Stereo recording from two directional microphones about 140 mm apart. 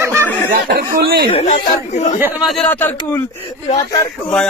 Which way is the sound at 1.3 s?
50° left (ahead or behind).